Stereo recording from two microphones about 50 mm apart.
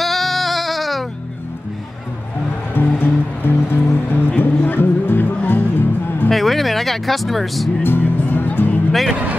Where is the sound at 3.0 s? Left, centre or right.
Left.